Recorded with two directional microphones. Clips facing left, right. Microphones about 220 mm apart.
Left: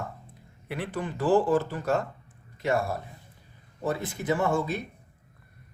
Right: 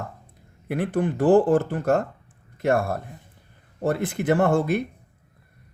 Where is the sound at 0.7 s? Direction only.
50° right (ahead or behind).